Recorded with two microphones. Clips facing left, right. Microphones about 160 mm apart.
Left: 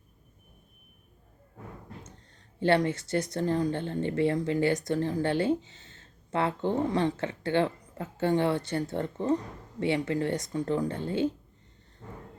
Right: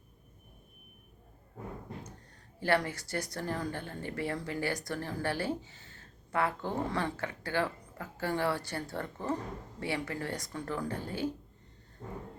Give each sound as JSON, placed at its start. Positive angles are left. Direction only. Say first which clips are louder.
{"t": 2.6, "sound": "speech", "louder": "left 5 dB", "side_deg": 20}